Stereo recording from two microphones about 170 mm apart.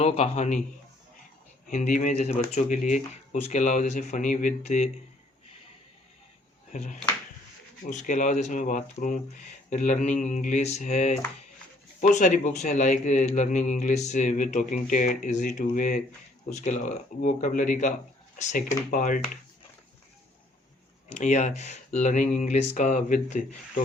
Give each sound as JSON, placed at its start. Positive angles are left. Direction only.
{"t": 0.0, "sound": "a man's voice", "side_deg": 40}
{"t": 1.7, "sound": "a man's voice", "side_deg": 45}
{"t": 6.7, "sound": "a man's voice", "side_deg": 45}
{"t": 21.1, "sound": "a man's voice", "side_deg": 45}